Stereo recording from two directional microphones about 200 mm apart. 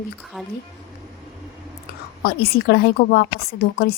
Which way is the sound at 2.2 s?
50° left (ahead or behind).